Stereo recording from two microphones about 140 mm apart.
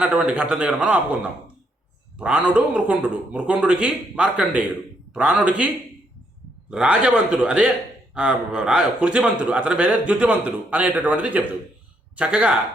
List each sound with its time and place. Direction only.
0.0 s a man's voice: 10° right (ahead or behind)